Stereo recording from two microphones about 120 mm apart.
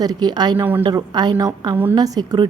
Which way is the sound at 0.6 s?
15° right (ahead or behind).